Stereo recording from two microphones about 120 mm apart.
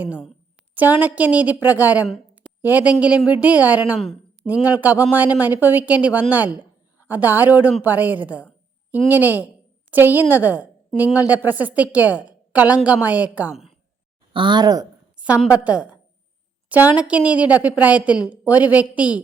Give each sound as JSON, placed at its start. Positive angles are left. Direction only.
{"t": 0.7, "sound": "a woman's voice", "side_deg": -15}
{"t": 14.3, "sound": "speech", "side_deg": -40}
{"t": 15.4, "sound": "a woman's voice", "side_deg": -10}